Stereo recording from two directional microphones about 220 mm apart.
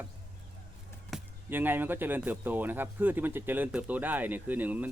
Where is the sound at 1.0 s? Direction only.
5° right (ahead or behind).